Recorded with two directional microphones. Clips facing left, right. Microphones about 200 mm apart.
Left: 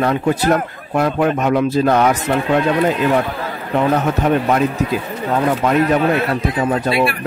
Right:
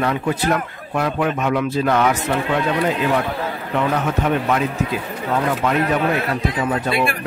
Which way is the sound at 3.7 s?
40° left (ahead or behind).